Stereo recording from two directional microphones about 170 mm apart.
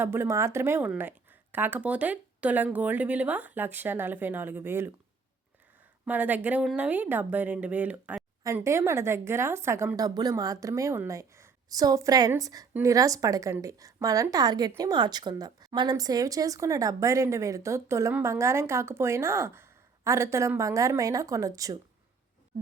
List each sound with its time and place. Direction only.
0.0 s speech: 15° right (ahead or behind)
6.1 s a woman's voice: 10° right (ahead or behind)